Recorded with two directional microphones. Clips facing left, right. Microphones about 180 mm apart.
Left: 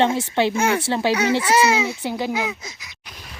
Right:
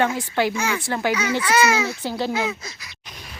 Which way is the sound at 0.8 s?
25° left (ahead or behind).